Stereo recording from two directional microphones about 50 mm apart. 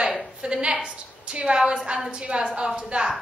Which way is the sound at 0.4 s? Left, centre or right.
Centre.